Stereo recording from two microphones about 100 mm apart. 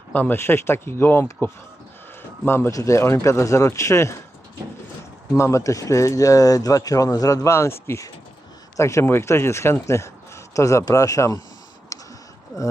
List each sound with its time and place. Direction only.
0.1 s speech: 15° left (ahead or behind)
5.4 s speech: 30° left (ahead or behind)
11.9 s a sound: 35° left (ahead or behind)